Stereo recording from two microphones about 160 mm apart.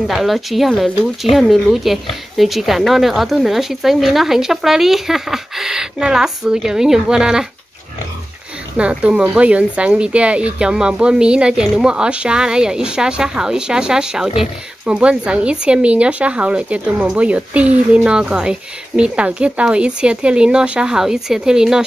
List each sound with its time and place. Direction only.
0.1 s speech: centre (ahead or behind)
8.7 s speech: 5° right (ahead or behind)